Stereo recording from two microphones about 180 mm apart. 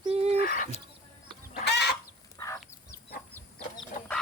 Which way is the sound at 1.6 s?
65° left (ahead or behind).